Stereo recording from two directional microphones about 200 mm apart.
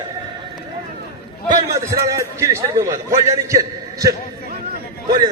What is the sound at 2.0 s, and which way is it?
A man's voice, 15° right (ahead or behind).